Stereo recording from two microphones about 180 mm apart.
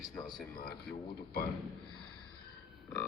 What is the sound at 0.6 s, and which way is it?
Speech, 60° left (ahead or behind).